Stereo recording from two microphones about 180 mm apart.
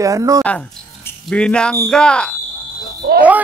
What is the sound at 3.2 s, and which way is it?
Speech, 10° right (ahead or behind).